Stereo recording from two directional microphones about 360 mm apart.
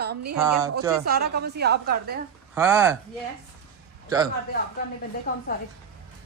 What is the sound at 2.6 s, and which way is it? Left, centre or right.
Speech, centre.